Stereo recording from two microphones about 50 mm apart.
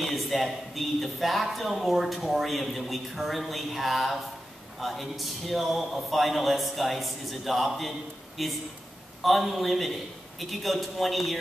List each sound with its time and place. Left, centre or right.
0.0 s a man's voice: centre